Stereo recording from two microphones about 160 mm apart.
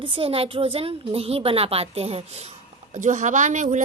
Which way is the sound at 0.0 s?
35° right (ahead or behind).